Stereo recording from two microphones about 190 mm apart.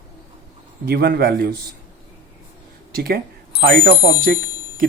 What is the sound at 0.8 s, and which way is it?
Speech, 55° right (ahead or behind).